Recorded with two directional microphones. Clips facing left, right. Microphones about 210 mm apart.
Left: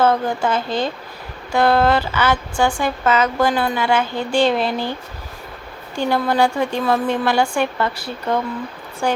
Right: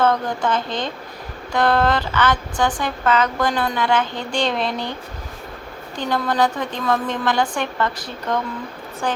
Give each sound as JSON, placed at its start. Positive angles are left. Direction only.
{"t": 0.0, "sound": "speech", "side_deg": 5}
{"t": 6.0, "sound": "speech", "side_deg": 10}